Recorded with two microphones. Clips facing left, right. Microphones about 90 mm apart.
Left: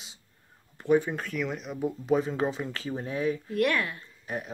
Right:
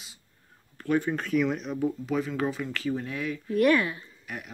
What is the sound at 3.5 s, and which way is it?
Speech, 5° right (ahead or behind).